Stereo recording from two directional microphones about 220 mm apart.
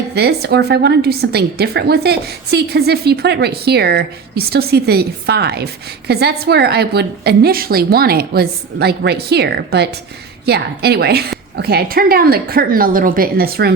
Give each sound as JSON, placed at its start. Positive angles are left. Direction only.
{"t": 0.1, "sound": "a woman's voice", "side_deg": -45}